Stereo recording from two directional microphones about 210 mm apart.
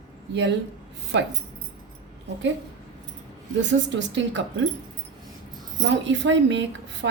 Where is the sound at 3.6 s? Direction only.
60° right (ahead or behind).